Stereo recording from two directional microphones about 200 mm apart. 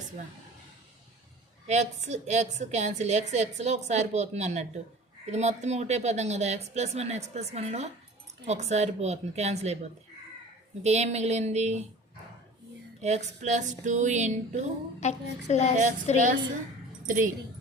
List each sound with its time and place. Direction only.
1.6 s a woman's voice: 35° right (ahead or behind)
13.0 s a woman's voice: 35° right (ahead or behind)
15.0 s speech: 35° left (ahead or behind)
17.1 s a woman's voice: 40° right (ahead or behind)